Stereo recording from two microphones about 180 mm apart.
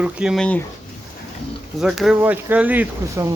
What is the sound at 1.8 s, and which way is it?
Speech, 5° right (ahead or behind).